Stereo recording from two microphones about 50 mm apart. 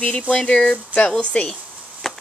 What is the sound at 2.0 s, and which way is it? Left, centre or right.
Chop, centre.